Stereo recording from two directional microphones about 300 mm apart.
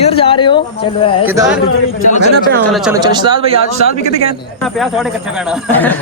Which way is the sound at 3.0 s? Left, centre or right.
Centre.